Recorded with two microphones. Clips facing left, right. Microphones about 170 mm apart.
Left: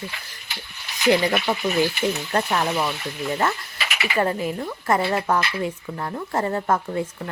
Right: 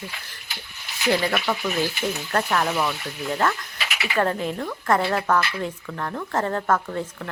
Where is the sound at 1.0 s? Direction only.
15° left (ahead or behind).